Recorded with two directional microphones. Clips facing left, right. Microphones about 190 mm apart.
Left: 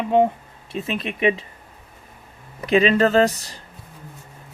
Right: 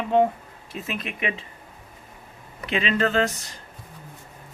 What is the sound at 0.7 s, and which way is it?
Speech, 30° left (ahead or behind).